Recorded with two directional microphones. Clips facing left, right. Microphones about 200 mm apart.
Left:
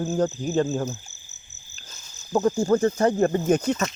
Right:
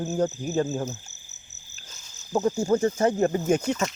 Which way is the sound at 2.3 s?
10° right (ahead or behind).